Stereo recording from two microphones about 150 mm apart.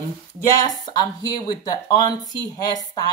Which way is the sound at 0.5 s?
25° left (ahead or behind).